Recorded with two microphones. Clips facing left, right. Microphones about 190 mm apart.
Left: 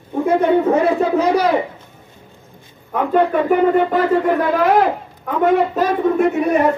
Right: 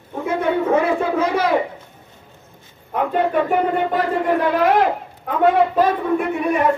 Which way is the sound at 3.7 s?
45° left (ahead or behind).